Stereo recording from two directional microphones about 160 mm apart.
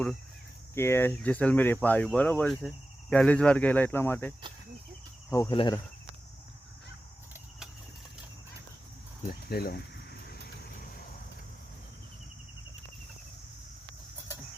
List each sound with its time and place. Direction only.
0.7 s speech: 15° left (ahead or behind)
5.3 s cricket: 20° left (ahead or behind)
9.5 s speech: 75° left (ahead or behind)